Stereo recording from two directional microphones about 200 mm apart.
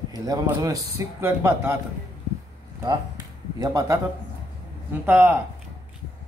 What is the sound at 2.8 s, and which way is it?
Speech, 20° right (ahead or behind).